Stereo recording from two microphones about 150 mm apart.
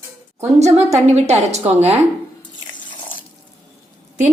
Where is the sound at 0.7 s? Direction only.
45° right (ahead or behind).